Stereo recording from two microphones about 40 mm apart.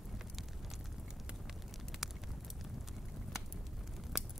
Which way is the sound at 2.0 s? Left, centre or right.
Centre.